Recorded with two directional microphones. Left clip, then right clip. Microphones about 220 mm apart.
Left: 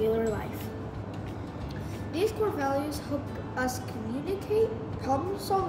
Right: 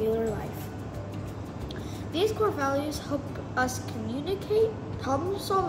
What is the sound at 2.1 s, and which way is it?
Speech, 15° right (ahead or behind).